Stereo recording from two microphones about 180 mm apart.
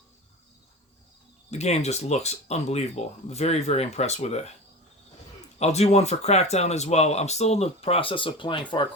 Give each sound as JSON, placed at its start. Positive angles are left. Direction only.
{"t": 1.5, "sound": "speech", "side_deg": 35}
{"t": 5.5, "sound": "speech", "side_deg": 35}